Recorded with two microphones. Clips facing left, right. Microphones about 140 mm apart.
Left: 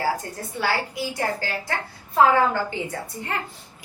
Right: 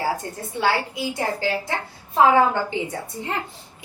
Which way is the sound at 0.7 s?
20° right (ahead or behind).